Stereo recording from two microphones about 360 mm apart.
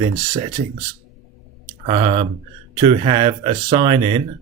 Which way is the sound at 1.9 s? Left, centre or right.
Centre.